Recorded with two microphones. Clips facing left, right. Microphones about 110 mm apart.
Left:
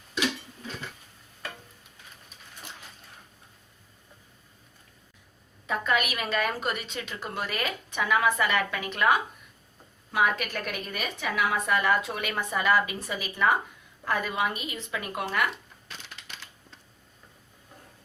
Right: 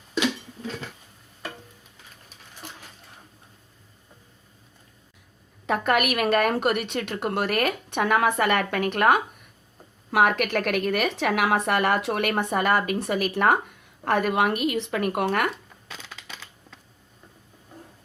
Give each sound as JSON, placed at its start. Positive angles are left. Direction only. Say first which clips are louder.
{"t": 5.6, "sound": "speech", "louder": "right 5 dB", "side_deg": -65}
{"t": 10.1, "sound": "speech", "louder": "right 5 dB", "side_deg": -70}